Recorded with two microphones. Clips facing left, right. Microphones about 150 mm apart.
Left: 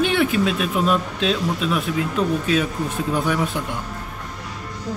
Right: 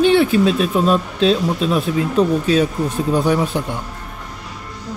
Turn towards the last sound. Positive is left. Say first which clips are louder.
# right 5 dB
turn(degrees=-30)  # may be behind; listen again after turning